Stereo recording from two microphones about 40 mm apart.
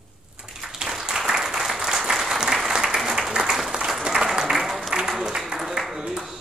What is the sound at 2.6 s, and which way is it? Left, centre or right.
Applause, centre.